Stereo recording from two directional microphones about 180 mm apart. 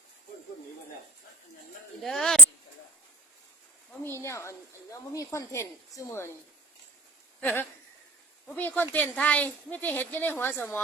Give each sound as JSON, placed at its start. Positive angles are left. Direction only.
{"t": 2.0, "sound": "speech", "side_deg": 0}
{"t": 4.0, "sound": "a woman's voice", "side_deg": 15}
{"t": 7.4, "sound": "a woman's voice", "side_deg": 10}